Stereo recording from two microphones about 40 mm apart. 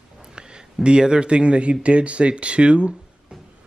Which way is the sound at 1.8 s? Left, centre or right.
Right.